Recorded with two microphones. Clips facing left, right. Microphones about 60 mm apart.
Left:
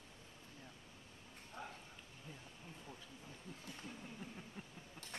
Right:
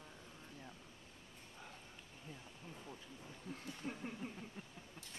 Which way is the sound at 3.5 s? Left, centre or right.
Right.